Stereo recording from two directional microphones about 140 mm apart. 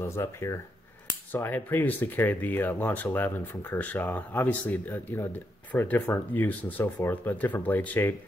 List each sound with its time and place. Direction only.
0.0 s speech: 20° left (ahead or behind)